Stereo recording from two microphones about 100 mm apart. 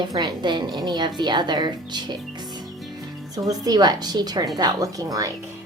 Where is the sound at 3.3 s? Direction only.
35° right (ahead or behind).